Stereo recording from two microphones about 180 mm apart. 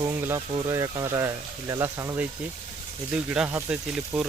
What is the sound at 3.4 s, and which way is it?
Speech, 5° right (ahead or behind).